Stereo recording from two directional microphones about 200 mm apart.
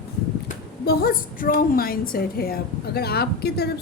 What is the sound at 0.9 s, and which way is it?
A woman's voice, 45° left (ahead or behind).